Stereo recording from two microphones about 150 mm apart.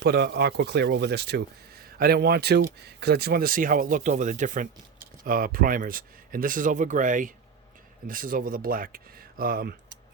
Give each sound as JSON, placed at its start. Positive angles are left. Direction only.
{"t": 0.0, "sound": "speech", "side_deg": -90}
{"t": 5.2, "sound": "speech", "side_deg": -70}